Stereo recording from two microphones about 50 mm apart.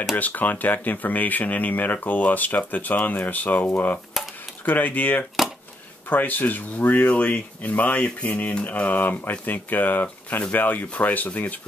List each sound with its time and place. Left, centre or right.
0.1 s speech: left